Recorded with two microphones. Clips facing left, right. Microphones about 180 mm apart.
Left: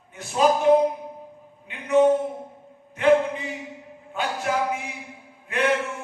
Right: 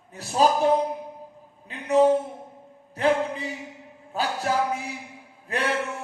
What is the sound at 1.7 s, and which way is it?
Speech, 35° right (ahead or behind).